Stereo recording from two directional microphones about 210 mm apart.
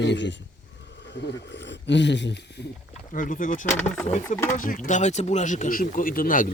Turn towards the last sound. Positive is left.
turn(degrees=40)  # may be behind; listen again after turning